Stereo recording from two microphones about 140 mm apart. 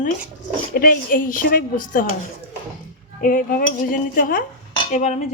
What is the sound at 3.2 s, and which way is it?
Speech, 80° left.